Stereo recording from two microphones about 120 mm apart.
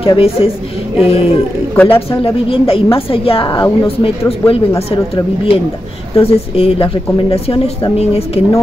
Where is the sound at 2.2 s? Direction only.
50° left (ahead or behind).